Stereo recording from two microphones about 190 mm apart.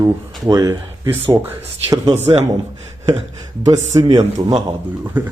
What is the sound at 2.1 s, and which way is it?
Speech, 35° right (ahead or behind).